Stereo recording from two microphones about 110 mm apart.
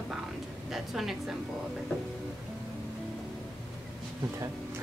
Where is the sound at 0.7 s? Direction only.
Centre (ahead or behind).